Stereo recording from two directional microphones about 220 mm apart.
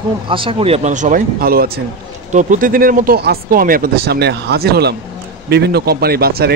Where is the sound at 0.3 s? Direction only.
25° right (ahead or behind).